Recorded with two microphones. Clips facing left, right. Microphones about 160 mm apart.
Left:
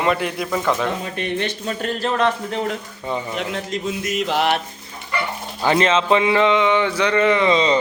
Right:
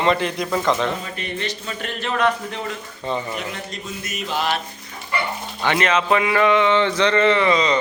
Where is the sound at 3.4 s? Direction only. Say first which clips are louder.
Left 5 dB; 90° left; by 4.6 s 70° left (ahead or behind).